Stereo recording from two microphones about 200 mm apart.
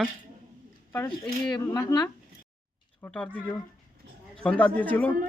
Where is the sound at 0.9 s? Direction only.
20° left (ahead or behind).